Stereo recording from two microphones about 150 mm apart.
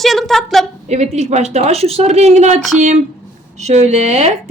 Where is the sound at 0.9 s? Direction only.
50° right (ahead or behind).